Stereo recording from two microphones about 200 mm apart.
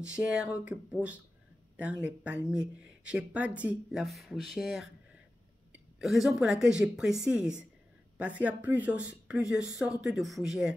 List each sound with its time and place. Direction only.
0.0 s speech: 5° right (ahead or behind)
5.9 s speech: centre (ahead or behind)